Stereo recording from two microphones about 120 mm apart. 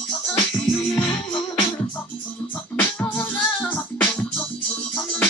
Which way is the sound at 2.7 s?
15° left (ahead or behind).